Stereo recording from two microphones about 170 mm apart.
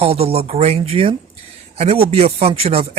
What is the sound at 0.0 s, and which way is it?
Speech, 35° right (ahead or behind).